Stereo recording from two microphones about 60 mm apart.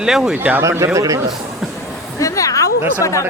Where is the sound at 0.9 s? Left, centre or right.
Right.